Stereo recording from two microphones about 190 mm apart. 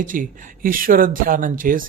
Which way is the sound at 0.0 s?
45° right (ahead or behind).